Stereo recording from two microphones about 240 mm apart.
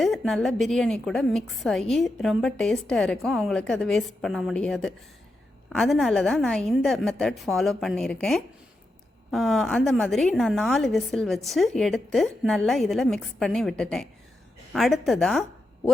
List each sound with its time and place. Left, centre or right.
0.0 s a woman's voice: centre